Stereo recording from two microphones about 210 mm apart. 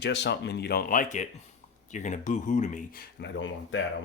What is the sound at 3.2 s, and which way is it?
Speech, 60° left (ahead or behind).